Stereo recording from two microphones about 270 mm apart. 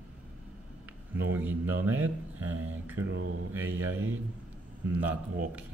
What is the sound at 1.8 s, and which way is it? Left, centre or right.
Speech, centre.